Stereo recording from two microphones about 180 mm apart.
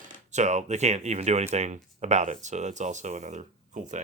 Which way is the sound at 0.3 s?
40° right (ahead or behind).